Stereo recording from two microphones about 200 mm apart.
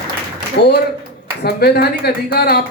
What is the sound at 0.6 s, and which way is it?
Speech, 55° left (ahead or behind).